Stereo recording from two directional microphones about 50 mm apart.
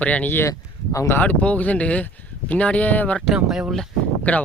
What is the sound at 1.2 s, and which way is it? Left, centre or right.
Speech, left.